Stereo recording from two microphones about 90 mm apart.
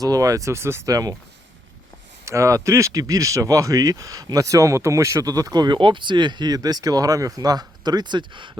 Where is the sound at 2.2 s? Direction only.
35° right (ahead or behind).